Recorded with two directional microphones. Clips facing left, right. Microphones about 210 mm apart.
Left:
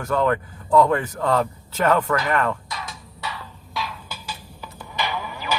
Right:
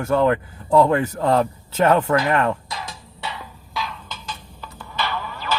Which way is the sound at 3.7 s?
Centre (ahead or behind).